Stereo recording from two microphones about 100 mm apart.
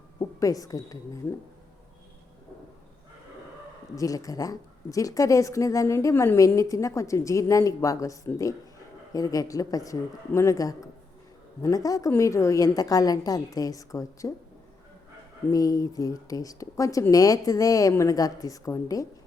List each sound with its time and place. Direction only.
0.2 s a woman's voice: 35° left (ahead or behind)
3.9 s speech: 35° left (ahead or behind)
15.5 s speech: 35° left (ahead or behind)